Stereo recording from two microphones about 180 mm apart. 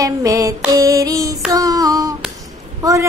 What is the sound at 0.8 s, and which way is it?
Female singing, 20° right (ahead or behind).